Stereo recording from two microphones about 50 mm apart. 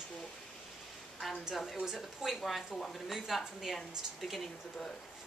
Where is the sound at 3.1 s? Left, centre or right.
Centre.